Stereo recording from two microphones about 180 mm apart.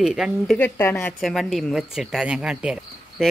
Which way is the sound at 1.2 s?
Centre (ahead or behind).